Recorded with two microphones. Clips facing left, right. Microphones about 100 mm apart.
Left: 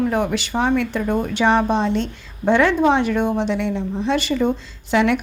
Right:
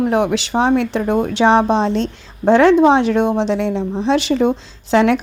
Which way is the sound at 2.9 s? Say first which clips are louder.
Right 4 dB; 85° right.